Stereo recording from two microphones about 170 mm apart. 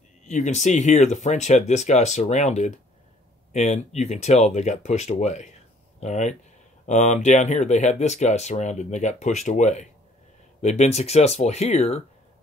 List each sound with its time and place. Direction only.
0.3 s speech: 45° left (ahead or behind)